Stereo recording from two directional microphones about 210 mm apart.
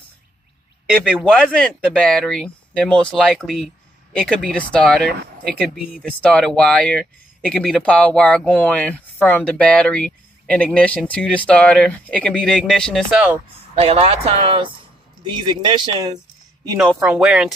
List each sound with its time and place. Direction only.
0.9 s speech: 5° left (ahead or behind)
13.7 s speech: 30° right (ahead or behind)
16.7 s speech: centre (ahead or behind)